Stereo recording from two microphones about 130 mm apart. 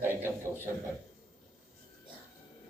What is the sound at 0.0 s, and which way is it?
Speech, 15° right (ahead or behind).